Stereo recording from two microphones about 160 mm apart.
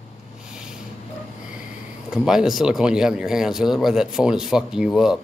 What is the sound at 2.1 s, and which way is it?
Speech, 5° right (ahead or behind).